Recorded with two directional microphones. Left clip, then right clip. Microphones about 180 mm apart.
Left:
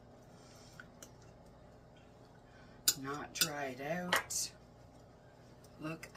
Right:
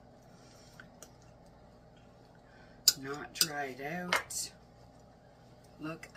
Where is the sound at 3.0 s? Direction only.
15° left (ahead or behind).